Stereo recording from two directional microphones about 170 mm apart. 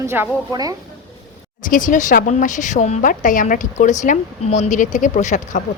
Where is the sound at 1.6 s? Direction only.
50° left (ahead or behind).